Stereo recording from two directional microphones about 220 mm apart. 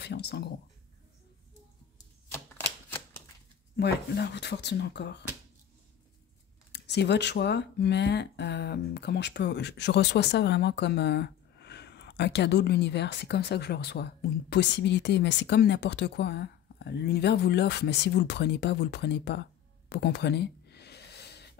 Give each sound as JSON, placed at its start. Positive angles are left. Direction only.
{"t": 0.0, "sound": "speech", "side_deg": 50}
{"t": 3.7, "sound": "speech", "side_deg": 50}
{"t": 6.7, "sound": "speech", "side_deg": 50}
{"t": 19.9, "sound": "a sound", "side_deg": 50}